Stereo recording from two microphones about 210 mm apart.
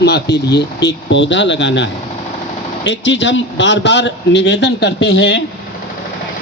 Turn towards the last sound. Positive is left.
turn(degrees=50)  # may be behind; listen again after turning